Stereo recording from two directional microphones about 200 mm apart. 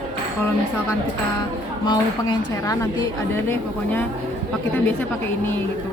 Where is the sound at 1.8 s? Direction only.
20° left (ahead or behind).